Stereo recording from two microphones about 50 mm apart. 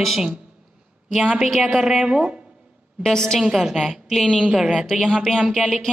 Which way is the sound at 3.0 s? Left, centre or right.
Centre.